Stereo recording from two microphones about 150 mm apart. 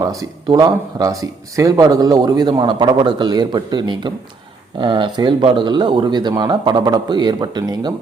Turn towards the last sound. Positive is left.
turn(degrees=-30)  # may be behind; listen again after turning